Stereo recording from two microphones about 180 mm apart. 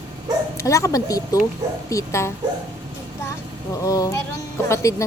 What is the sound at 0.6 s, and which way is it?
A woman's voice, 15° left (ahead or behind).